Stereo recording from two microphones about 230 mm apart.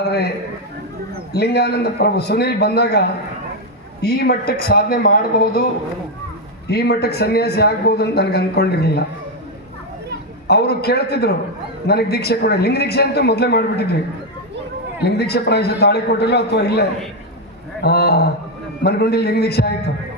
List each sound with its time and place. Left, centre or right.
0.0 s a man's voice: left
6.7 s a man's voice: left
10.4 s a man's voice: left
15.0 s a man's voice: left
17.8 s a man's voice: left